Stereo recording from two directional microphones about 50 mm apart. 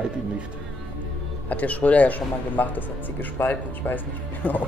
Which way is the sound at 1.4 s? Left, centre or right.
Left.